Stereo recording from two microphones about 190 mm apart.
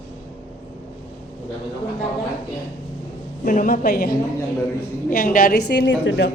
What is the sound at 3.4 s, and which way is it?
A woman's voice, 45° left (ahead or behind).